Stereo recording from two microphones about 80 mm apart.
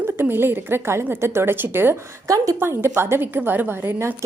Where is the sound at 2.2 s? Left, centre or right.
Right.